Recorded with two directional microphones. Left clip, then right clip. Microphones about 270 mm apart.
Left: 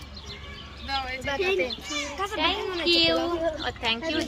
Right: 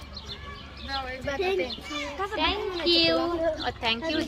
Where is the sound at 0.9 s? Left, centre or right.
Left.